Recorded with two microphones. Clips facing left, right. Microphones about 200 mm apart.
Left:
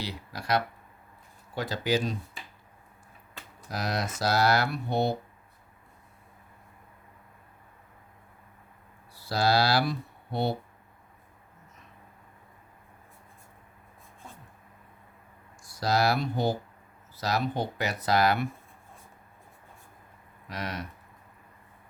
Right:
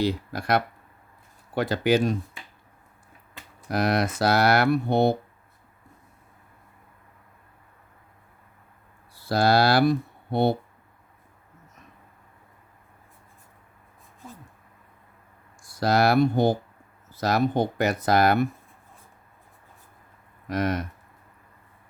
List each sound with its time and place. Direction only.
0.0 s speech: 55° right (ahead or behind)
3.7 s speech: 60° right (ahead or behind)
9.3 s speech: 55° right (ahead or behind)
15.8 s speech: 55° right (ahead or behind)
20.5 s speech: 50° right (ahead or behind)